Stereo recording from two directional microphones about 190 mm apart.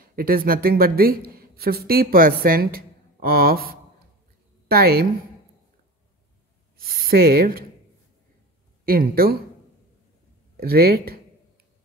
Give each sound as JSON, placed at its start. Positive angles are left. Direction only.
{"t": 0.0, "sound": "speech", "side_deg": -50}
{"t": 6.8, "sound": "speech", "side_deg": -50}
{"t": 8.8, "sound": "speech", "side_deg": -50}
{"t": 10.6, "sound": "speech", "side_deg": -55}